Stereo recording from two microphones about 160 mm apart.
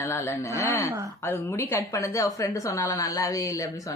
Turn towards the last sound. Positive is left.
turn(degrees=20)  # may be behind; listen again after turning